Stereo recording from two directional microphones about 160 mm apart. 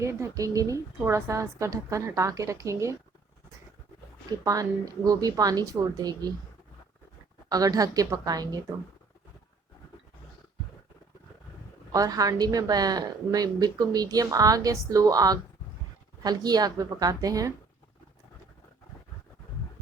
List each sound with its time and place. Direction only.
0.0 s a woman's voice: 20° right (ahead or behind)
4.3 s a woman's voice: 20° right (ahead or behind)
7.5 s a woman's voice: 20° right (ahead or behind)
11.9 s a woman's voice: 20° right (ahead or behind)